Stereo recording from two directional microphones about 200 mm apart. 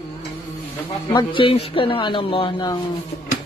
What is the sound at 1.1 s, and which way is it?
Speech, 25° left (ahead or behind).